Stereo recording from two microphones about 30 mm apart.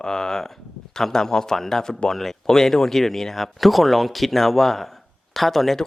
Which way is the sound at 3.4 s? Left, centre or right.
Centre.